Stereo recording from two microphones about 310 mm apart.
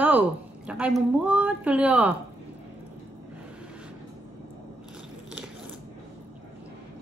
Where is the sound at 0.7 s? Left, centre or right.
Centre.